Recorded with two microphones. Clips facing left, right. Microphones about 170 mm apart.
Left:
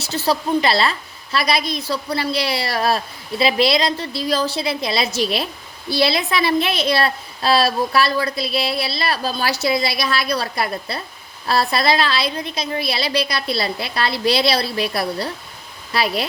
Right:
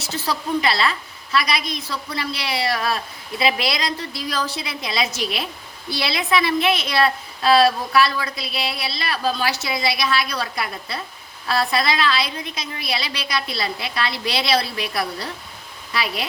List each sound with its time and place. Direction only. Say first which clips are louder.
0.0 s a woman's voice: left 5 dB; 30° left (ahead or behind)